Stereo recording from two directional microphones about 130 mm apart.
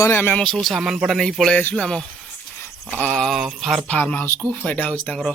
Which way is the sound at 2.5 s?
20° left (ahead or behind).